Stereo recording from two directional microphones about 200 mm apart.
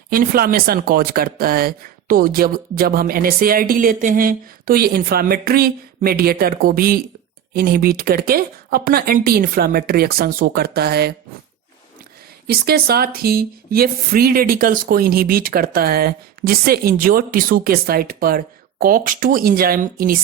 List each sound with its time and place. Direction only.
0.1 s speech: 45° right (ahead or behind)
12.5 s speech: 50° right (ahead or behind)